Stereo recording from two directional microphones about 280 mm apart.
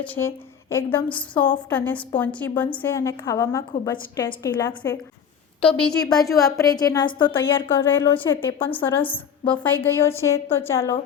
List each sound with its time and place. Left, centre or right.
0.0 s a woman's voice: centre